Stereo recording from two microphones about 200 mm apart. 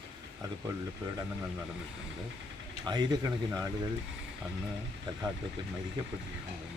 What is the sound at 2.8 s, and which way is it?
Speech, 20° right (ahead or behind).